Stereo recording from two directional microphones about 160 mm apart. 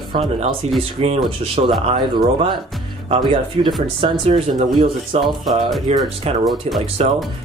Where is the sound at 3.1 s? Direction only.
30° right (ahead or behind).